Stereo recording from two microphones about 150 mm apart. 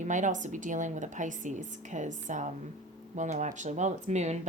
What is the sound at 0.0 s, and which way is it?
A woman's voice, 55° right (ahead or behind).